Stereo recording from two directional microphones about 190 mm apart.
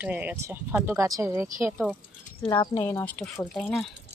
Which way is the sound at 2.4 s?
20° left (ahead or behind).